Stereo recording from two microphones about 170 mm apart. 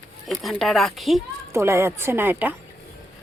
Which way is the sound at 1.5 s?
15° right (ahead or behind).